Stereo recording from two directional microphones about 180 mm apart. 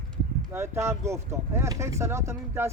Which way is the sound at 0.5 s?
15° right (ahead or behind).